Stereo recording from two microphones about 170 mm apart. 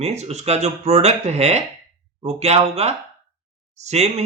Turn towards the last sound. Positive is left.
turn(degrees=-40)  # may be behind; listen again after turning